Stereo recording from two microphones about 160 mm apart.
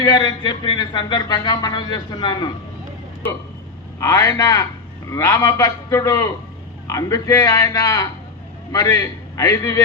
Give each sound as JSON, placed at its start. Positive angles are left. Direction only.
{"t": 0.0, "sound": "speech", "side_deg": 25}
{"t": 4.0, "sound": "speech", "side_deg": 20}